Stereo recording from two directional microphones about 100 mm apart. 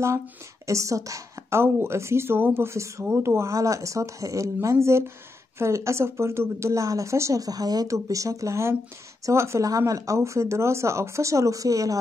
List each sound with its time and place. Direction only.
0.7 s a woman's voice: 30° right (ahead or behind)